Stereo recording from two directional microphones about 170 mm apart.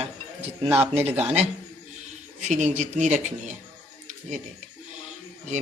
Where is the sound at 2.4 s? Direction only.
45° right (ahead or behind).